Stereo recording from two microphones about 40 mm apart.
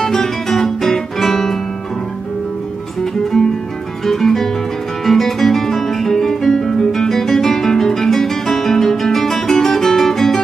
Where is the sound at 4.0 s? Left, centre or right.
Centre.